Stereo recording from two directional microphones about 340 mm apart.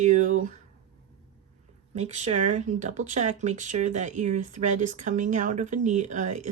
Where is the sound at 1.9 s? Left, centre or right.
Centre.